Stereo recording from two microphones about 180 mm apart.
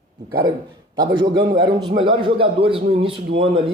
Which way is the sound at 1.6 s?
25° right (ahead or behind).